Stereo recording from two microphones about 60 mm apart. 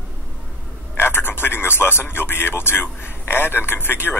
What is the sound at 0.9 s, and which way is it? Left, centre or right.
Speech, left.